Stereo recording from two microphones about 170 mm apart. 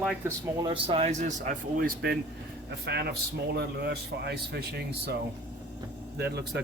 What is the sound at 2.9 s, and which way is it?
Speech, 70° right (ahead or behind).